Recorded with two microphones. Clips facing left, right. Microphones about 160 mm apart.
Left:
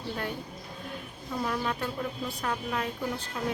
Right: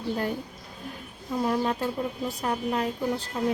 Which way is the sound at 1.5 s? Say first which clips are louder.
Right 6 dB; 35° right (ahead or behind).